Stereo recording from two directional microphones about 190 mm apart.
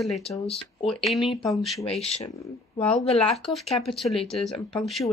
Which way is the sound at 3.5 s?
Centre (ahead or behind).